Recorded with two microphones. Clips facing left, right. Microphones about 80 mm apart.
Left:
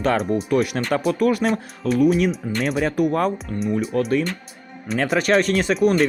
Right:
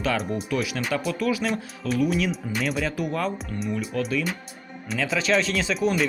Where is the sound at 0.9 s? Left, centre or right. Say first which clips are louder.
Left 7 dB; left.